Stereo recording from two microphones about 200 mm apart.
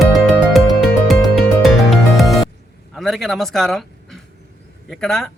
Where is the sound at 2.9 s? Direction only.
Centre (ahead or behind).